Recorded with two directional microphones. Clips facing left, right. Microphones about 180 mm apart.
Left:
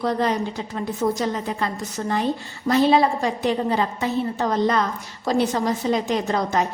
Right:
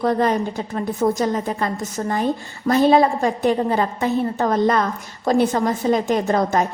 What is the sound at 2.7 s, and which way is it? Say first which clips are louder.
A woman's voice: right 2 dB; 50° right (ahead or behind).